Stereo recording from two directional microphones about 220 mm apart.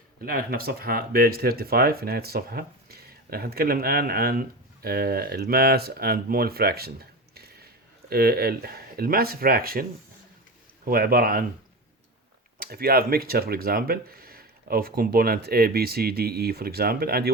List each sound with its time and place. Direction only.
0.2 s speech: 45° right (ahead or behind)
10.8 s speech: 40° right (ahead or behind)
12.5 s speech: 45° right (ahead or behind)